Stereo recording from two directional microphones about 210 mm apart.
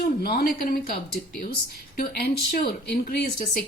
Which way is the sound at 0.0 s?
45° left (ahead or behind).